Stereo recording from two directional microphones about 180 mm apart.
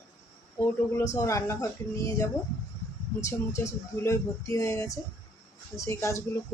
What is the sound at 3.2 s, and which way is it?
Speech, 15° left (ahead or behind).